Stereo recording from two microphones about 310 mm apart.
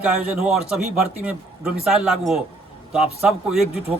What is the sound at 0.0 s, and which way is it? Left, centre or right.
A man's voice, centre.